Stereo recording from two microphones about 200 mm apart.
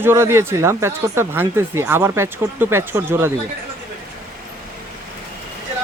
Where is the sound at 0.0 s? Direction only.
10° right (ahead or behind).